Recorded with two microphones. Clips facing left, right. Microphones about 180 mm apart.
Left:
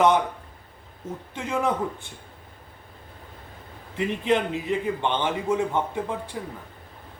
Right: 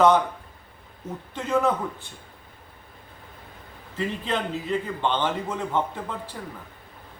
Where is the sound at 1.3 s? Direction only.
10° left (ahead or behind).